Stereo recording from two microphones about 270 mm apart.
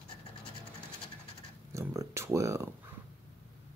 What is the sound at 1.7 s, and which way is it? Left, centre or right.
Speech, centre.